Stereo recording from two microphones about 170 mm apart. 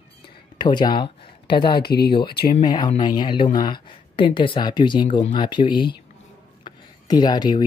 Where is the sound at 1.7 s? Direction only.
70° left (ahead or behind).